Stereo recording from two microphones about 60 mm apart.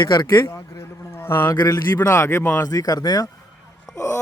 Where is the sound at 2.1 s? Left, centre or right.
Left.